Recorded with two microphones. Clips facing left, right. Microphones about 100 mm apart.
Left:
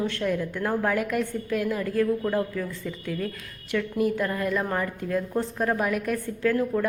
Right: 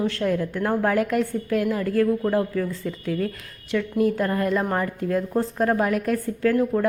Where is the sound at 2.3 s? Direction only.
30° right (ahead or behind).